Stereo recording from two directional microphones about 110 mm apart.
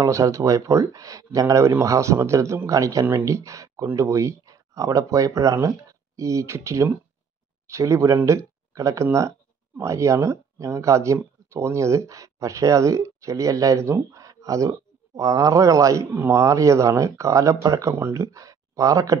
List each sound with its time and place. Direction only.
0.0 s speech: 30° right (ahead or behind)